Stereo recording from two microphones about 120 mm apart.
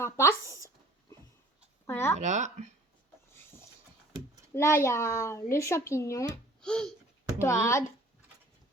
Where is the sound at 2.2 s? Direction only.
80° right.